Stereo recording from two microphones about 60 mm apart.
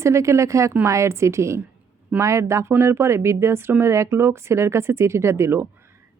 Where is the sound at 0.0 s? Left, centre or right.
Right.